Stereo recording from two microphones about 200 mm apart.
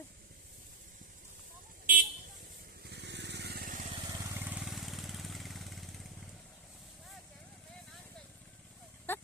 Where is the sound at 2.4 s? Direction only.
50° right (ahead or behind).